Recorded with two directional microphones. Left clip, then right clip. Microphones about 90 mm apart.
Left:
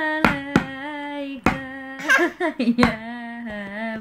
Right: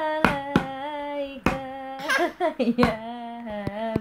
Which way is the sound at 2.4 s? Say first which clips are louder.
Left 1 dB; 35° right (ahead or behind).